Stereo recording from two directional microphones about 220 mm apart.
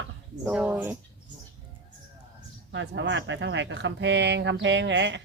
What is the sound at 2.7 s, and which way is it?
Speech, 55° right (ahead or behind).